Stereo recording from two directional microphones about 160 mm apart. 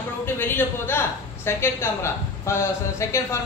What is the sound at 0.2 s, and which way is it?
A woman's voice, 15° left (ahead or behind).